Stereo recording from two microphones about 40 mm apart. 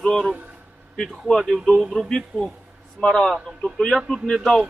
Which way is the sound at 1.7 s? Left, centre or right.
Centre.